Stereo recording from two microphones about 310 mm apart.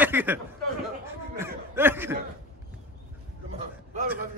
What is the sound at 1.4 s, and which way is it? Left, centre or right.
Chuckle, centre.